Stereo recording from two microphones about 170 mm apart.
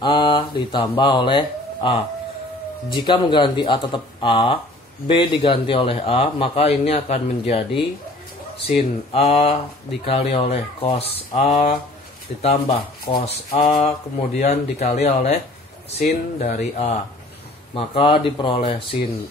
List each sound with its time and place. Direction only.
0.0 s speech: 25° left (ahead or behind)
9.1 s speech: 35° left (ahead or behind)